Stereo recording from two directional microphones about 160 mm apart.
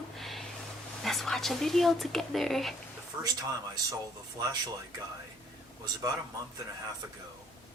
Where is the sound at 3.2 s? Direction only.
25° right (ahead or behind).